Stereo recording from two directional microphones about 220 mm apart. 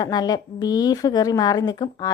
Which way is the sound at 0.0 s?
20° left (ahead or behind).